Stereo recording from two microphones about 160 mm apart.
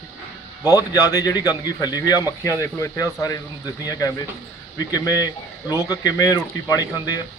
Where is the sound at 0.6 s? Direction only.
20° left (ahead or behind).